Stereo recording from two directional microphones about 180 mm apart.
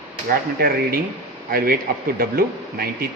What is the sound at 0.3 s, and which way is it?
Speech, 55° right (ahead or behind).